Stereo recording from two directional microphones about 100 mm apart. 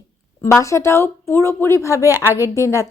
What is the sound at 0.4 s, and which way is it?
Speech, 30° left (ahead or behind).